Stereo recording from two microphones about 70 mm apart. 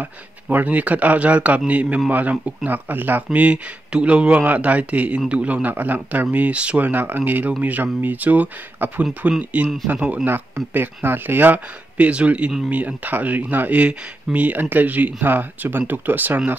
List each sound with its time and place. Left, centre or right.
0.0 s speech: right